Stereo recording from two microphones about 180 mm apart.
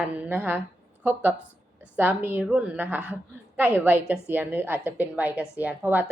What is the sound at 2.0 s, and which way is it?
A woman's voice, 10° right (ahead or behind).